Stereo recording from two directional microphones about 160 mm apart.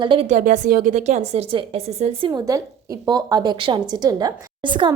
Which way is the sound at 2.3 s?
20° right (ahead or behind).